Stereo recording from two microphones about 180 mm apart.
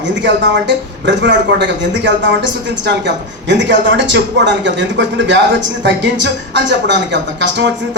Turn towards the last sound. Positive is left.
turn(degrees=-80)